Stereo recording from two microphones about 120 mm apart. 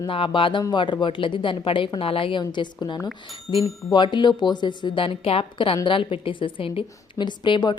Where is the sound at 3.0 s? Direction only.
Centre (ahead or behind).